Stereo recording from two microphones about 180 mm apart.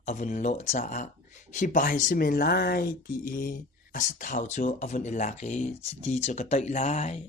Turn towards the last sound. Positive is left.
turn(degrees=35)  # may be behind; listen again after turning